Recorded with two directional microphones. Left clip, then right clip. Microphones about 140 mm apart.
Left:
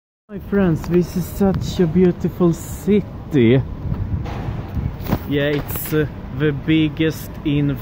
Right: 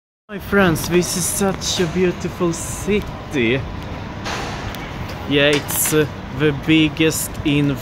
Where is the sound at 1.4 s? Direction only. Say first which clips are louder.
Left 1 dB; 45° left (ahead or behind).